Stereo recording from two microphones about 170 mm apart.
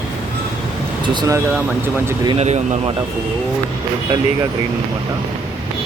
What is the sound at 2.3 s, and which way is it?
Speech, 40° right (ahead or behind).